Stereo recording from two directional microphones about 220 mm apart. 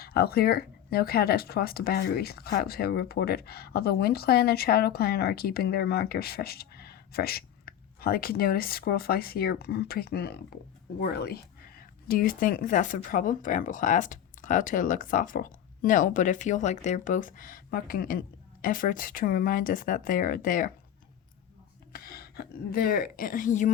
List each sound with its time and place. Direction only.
0.0 s a woman's voice: 45° left (ahead or behind)
21.9 s a woman's voice: 45° left (ahead or behind)